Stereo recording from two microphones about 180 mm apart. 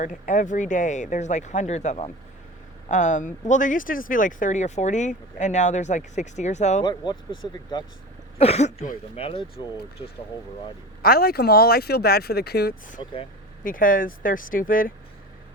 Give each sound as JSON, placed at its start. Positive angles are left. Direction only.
{"t": 0.0, "sound": "speech", "side_deg": 45}
{"t": 6.8, "sound": "speech", "side_deg": 25}
{"t": 8.4, "sound": "speech", "side_deg": 35}
{"t": 11.0, "sound": "speech", "side_deg": 55}